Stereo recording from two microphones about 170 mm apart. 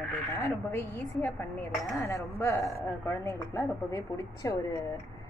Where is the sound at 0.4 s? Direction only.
15° left (ahead or behind).